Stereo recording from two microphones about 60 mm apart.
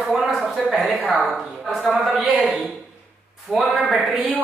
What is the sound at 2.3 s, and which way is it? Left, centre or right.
Speech, right.